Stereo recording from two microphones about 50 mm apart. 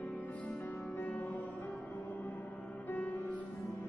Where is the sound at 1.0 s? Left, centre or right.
Left.